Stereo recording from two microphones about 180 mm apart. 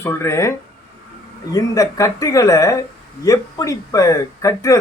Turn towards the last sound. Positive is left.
turn(degrees=20)  # may be behind; listen again after turning